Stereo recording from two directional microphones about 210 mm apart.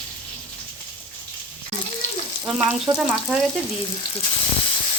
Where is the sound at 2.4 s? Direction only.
5° right (ahead or behind).